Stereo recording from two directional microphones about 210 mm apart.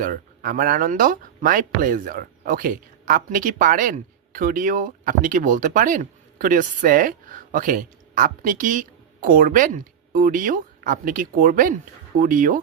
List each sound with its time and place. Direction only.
0.0 s speech: 40° right (ahead or behind)